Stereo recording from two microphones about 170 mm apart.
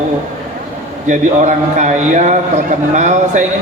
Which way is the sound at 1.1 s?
45° right (ahead or behind).